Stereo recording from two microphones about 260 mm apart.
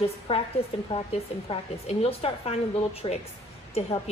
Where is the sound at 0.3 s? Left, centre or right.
Left.